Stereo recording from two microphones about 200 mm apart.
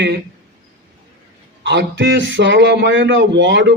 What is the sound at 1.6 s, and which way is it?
A man's voice, 60° right (ahead or behind).